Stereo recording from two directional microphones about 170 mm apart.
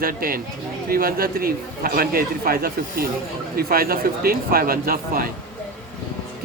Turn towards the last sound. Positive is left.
turn(degrees=-60)  # may be behind; listen again after turning